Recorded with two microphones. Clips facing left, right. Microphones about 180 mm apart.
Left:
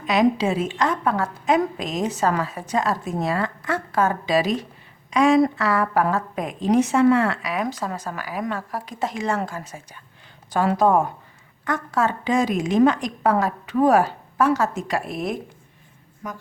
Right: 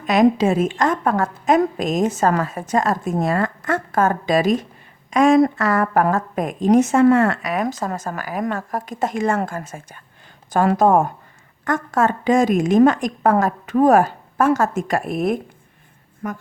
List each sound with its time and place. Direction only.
0.0 s a woman's voice: 50° right (ahead or behind)